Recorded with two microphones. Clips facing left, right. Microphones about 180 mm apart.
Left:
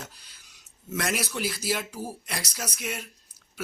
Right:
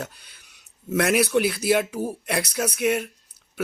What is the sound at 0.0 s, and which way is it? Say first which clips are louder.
Speech: right 9 dB; 60° right (ahead or behind).